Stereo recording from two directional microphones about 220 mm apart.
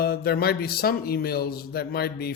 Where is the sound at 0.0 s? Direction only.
45° left (ahead or behind).